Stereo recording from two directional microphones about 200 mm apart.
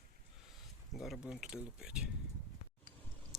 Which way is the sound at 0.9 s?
Centre (ahead or behind).